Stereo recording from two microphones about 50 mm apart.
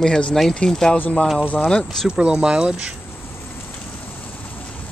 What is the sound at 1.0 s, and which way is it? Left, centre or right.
Speech, left.